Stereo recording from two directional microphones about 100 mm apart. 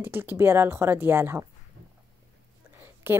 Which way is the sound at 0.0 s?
20° right (ahead or behind).